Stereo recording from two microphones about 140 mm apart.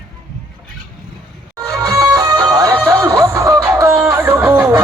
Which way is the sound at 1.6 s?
25° right (ahead or behind).